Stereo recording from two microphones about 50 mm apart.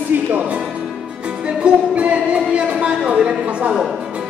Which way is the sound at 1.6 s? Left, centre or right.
Right.